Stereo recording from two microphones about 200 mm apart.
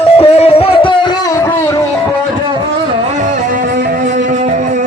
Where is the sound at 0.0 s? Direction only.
30° left (ahead or behind).